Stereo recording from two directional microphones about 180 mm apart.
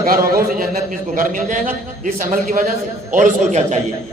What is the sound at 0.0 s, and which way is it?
A man's voice, 55° right (ahead or behind).